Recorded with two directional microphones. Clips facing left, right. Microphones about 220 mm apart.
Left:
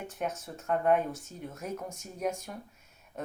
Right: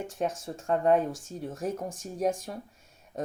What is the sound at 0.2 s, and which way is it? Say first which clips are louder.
Speech: right 4 dB; 30° right (ahead or behind).